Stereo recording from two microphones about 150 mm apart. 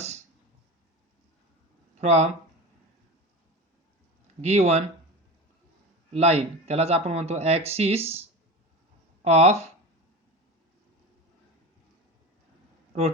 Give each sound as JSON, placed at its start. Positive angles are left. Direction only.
{"t": 2.0, "sound": "speech", "side_deg": -50}
{"t": 4.4, "sound": "speech", "side_deg": -45}
{"t": 6.1, "sound": "speech", "side_deg": -45}
{"t": 9.2, "sound": "speech", "side_deg": -45}